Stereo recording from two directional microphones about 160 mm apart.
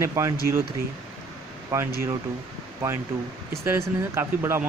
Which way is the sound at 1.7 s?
20° right (ahead or behind).